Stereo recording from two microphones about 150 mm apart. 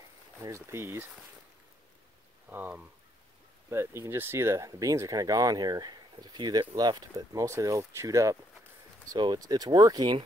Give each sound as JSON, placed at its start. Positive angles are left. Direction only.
{"t": 0.4, "sound": "speech", "side_deg": -20}
{"t": 2.5, "sound": "speech", "side_deg": -10}